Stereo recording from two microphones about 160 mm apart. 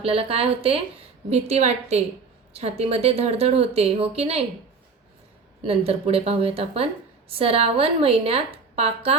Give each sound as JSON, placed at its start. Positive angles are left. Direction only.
{"t": 0.0, "sound": "a woman's voice", "side_deg": -35}
{"t": 5.6, "sound": "a woman's voice", "side_deg": -40}